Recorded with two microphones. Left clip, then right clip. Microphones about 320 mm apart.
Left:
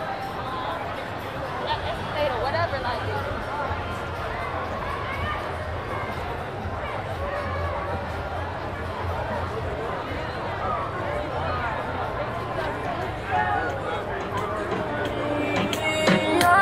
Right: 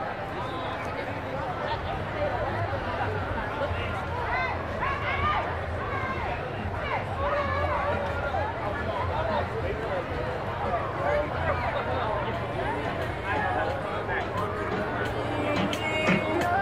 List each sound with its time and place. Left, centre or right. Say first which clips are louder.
16.0 s music: left 5 dB; left